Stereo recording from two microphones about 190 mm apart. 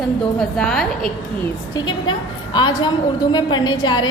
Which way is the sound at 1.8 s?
25° left (ahead or behind).